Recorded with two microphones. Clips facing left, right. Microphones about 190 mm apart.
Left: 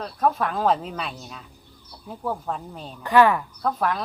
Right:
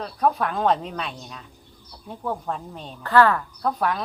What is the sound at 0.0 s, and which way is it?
Speech, centre (ahead or behind).